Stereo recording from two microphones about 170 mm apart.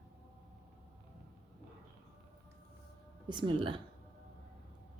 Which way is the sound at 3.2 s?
25° right (ahead or behind).